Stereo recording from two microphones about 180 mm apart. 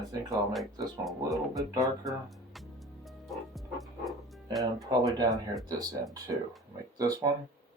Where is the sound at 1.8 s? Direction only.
Centre (ahead or behind).